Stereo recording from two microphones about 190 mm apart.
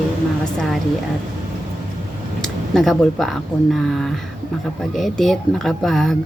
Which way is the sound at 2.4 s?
Centre (ahead or behind).